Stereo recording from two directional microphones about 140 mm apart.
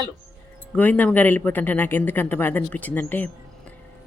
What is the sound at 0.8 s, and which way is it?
Speech, 10° left (ahead or behind).